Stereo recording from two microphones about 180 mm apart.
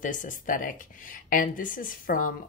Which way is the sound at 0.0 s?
45° left (ahead or behind).